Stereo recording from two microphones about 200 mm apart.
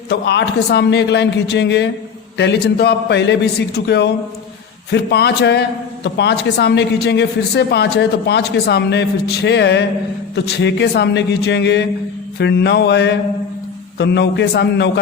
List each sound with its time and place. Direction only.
0.1 s a man's voice: 55° left (ahead or behind)